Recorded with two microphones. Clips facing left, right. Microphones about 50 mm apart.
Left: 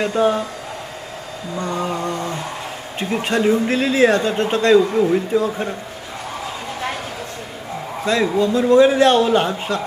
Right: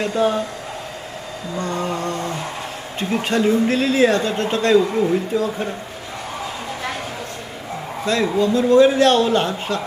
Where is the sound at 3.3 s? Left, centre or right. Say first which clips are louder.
Even; centre.